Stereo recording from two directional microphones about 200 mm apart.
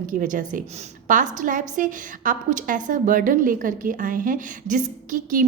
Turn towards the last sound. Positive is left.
turn(degrees=-40)  # may be behind; listen again after turning